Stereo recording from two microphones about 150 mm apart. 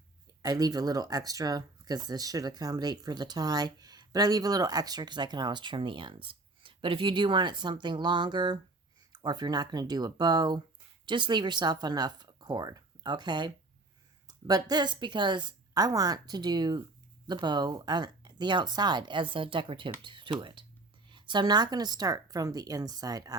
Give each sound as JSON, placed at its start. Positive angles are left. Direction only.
{"t": 0.4, "sound": "speech", "side_deg": -25}